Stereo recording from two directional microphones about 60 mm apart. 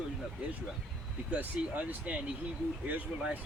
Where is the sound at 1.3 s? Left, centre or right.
Right.